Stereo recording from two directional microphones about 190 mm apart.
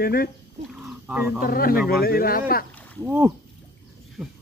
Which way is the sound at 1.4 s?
50° left (ahead or behind).